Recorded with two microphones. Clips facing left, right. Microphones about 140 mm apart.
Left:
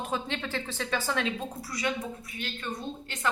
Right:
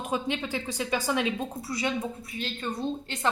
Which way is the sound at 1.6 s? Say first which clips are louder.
Right 2 dB; 25° right (ahead or behind).